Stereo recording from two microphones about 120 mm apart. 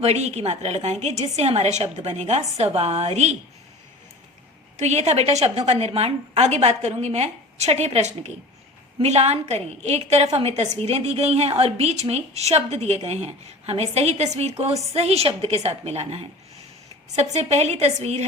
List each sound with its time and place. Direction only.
0.0 s a woman's voice: 60° right (ahead or behind)
4.8 s a woman's voice: 65° right (ahead or behind)